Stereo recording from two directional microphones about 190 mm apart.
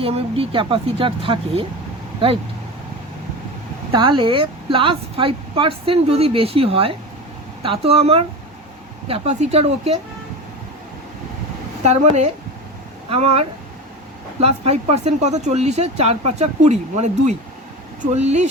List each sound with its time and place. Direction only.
0.0 s a woman's voice: 30° right (ahead or behind)
3.9 s a woman's voice: 25° right (ahead or behind)
11.8 s speech: 35° right (ahead or behind)